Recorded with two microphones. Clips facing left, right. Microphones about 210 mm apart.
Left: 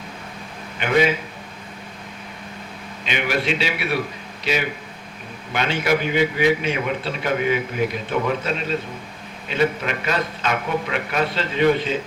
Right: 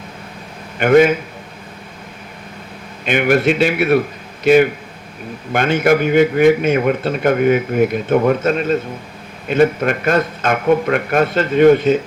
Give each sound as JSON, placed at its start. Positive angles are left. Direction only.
{"t": 0.8, "sound": "a man's voice", "side_deg": -50}
{"t": 3.0, "sound": "a man's voice", "side_deg": -50}